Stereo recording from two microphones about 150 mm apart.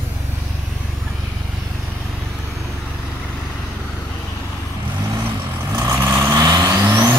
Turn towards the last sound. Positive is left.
turn(degrees=-15)  # may be behind; listen again after turning